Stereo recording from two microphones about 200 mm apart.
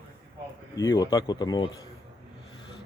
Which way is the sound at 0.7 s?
15° left (ahead or behind).